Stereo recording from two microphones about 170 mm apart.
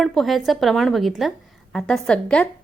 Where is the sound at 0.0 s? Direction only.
Centre (ahead or behind).